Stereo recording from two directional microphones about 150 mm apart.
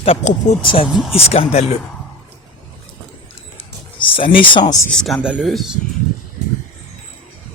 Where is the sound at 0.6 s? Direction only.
35° left (ahead or behind).